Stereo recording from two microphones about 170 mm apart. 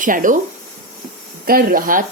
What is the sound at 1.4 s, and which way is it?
Speech, 60° right (ahead or behind).